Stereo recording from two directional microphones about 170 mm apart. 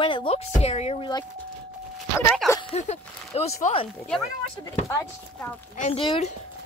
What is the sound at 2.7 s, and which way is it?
A woman's voice, 40° left (ahead or behind).